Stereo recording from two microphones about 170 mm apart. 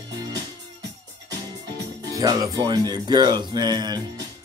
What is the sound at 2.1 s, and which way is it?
Speech, 20° right (ahead or behind).